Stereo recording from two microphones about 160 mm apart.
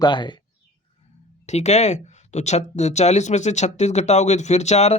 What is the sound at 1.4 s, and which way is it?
Speech, 45° left (ahead or behind).